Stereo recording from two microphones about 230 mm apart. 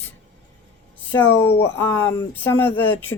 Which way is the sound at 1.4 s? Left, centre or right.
Centre.